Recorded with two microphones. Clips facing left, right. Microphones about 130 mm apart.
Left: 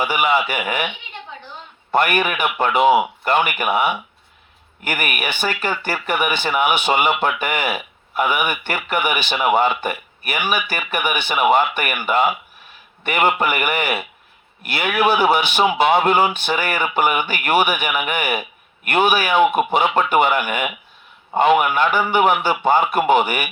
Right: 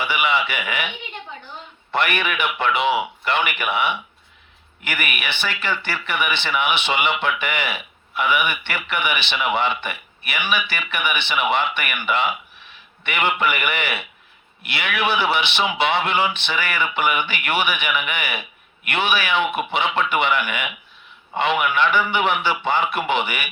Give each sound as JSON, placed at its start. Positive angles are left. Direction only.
{"t": 0.0, "sound": "speech", "side_deg": 45}
{"t": 1.9, "sound": "speech", "side_deg": 45}